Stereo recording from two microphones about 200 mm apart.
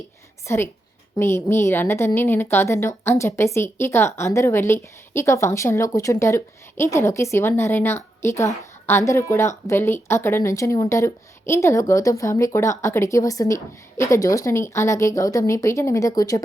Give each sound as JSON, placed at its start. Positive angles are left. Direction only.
{"t": 0.4, "sound": "a woman's voice", "side_deg": 15}